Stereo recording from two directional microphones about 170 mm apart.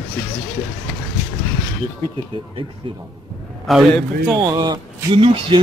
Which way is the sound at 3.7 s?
Centre (ahead or behind).